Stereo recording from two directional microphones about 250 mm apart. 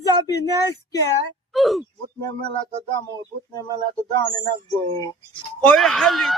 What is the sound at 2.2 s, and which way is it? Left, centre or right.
Speech, centre.